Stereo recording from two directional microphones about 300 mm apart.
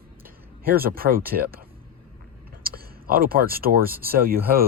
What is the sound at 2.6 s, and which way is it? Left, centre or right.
Speech, right.